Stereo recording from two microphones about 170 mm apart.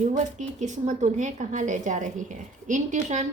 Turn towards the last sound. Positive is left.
turn(degrees=-45)  # may be behind; listen again after turning